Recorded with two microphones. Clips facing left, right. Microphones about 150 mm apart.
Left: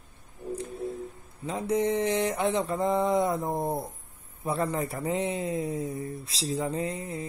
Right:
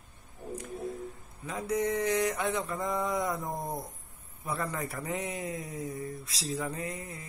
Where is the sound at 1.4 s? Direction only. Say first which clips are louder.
Left 4 dB; 25° left (ahead or behind).